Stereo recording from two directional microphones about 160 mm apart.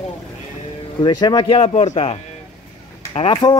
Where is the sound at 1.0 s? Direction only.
25° left (ahead or behind).